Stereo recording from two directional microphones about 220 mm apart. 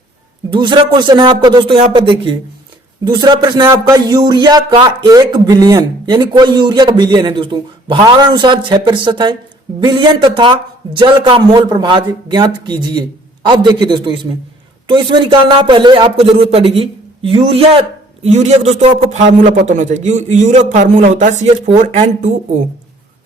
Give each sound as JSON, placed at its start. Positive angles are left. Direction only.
{"t": 0.5, "sound": "a man's voice", "side_deg": -20}